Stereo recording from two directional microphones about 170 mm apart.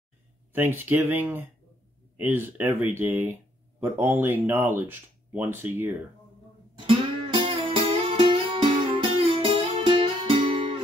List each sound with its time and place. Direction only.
0.5 s speech: 10° right (ahead or behind)
6.9 s music: 30° right (ahead or behind)